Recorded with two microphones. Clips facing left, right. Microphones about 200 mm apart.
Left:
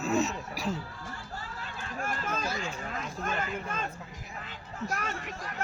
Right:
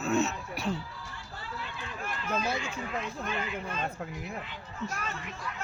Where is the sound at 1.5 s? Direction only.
45° left (ahead or behind).